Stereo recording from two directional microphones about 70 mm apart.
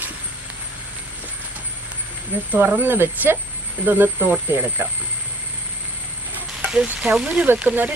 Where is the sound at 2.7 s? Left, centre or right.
Right.